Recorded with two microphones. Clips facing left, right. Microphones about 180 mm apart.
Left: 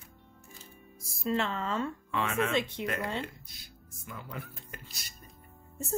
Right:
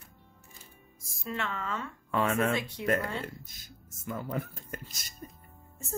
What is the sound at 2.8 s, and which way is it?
Speech, 20° left (ahead or behind).